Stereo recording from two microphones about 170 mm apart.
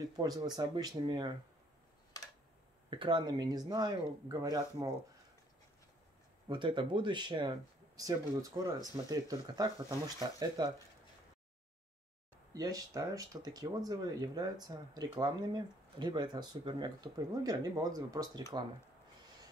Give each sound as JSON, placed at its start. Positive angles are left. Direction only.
{"t": 0.0, "sound": "speech", "side_deg": -25}
{"t": 2.9, "sound": "speech", "side_deg": -30}
{"t": 6.5, "sound": "speech", "side_deg": -30}
{"t": 12.5, "sound": "speech", "side_deg": -20}